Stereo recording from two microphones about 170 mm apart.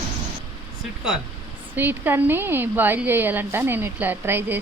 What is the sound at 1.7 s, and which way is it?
A woman's voice, 10° right (ahead or behind).